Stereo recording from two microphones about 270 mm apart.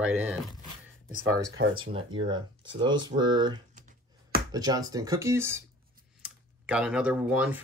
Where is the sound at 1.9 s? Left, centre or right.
Centre.